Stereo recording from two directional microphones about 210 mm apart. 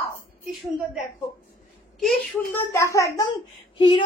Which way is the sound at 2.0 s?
5° left (ahead or behind).